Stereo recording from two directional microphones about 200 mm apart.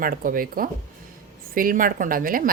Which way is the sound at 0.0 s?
45° right (ahead or behind).